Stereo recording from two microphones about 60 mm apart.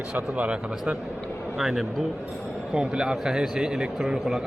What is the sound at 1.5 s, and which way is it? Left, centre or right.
A man's voice, centre.